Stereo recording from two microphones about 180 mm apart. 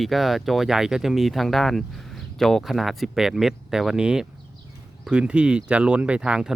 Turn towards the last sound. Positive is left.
turn(degrees=-5)  # may be behind; listen again after turning